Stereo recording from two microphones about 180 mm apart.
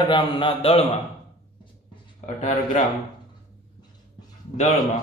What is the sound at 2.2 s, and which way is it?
Speech, 40° left (ahead or behind).